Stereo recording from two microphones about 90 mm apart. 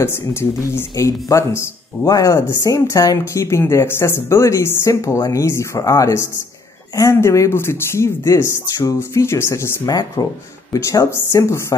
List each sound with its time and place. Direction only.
0.0 s speech: 30° left (ahead or behind)
10.2 s speech: 45° left (ahead or behind)